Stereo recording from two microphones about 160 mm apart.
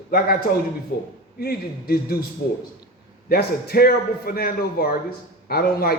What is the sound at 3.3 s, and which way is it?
A man's voice, 75° left (ahead or behind).